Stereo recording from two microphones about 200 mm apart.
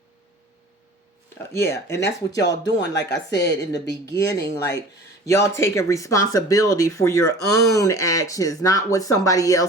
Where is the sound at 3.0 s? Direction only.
60° left (ahead or behind).